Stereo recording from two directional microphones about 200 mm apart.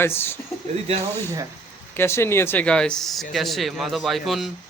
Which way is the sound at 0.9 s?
30° right (ahead or behind).